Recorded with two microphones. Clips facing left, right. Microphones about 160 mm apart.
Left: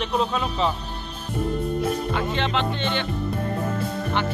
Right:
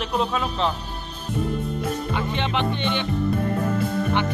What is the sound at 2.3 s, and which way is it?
Speech, 15° right (ahead or behind).